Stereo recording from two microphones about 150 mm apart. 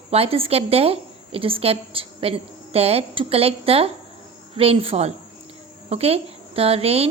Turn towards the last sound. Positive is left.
turn(degrees=-40)  # may be behind; listen again after turning